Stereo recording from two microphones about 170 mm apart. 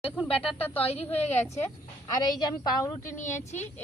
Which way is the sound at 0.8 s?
35° left (ahead or behind).